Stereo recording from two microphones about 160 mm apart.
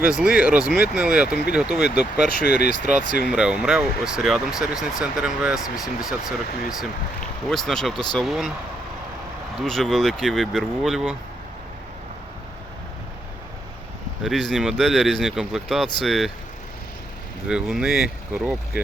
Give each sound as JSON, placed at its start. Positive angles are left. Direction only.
{"t": 0.1, "sound": "speech", "side_deg": -5}
{"t": 2.6, "sound": "speech", "side_deg": -50}
{"t": 3.2, "sound": "speech", "side_deg": -5}
{"t": 9.6, "sound": "speech", "side_deg": 0}
{"t": 14.3, "sound": "speech", "side_deg": 0}
{"t": 17.5, "sound": "speech", "side_deg": -5}